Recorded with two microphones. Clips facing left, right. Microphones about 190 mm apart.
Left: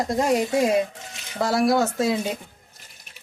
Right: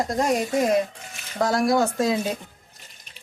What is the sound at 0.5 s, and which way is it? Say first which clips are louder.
Speech: left 1 dB; 10° left (ahead or behind).